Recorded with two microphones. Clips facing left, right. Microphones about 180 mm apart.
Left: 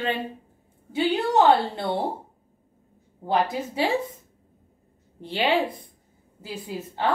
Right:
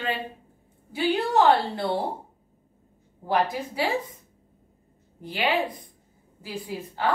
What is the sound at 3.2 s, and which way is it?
Speech, 25° left (ahead or behind).